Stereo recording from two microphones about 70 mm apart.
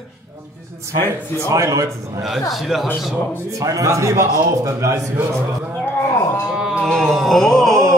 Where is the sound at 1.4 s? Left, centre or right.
Right.